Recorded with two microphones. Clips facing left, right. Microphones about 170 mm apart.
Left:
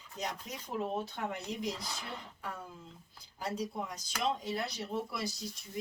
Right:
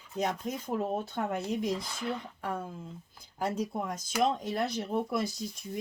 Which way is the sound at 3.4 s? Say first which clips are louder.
Right 5 dB; 50° right (ahead or behind).